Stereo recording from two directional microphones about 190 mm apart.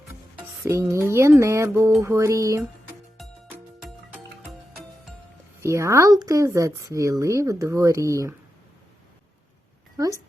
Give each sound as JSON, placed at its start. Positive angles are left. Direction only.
{"t": 0.3, "sound": "speech", "side_deg": -15}
{"t": 5.6, "sound": "speech", "side_deg": -15}